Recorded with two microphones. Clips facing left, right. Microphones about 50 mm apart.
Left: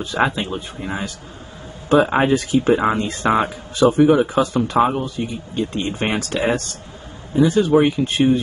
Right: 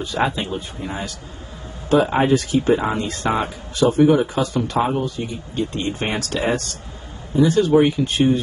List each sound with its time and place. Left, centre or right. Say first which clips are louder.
0.0 s speech: left 2 dB; left